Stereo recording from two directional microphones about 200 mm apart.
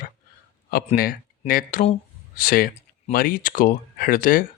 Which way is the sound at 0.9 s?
45° left (ahead or behind).